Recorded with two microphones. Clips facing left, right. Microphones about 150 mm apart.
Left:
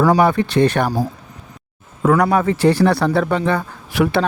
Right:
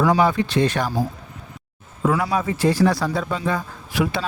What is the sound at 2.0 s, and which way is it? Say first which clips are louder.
Speech: left 6 dB; 60° left (ahead or behind).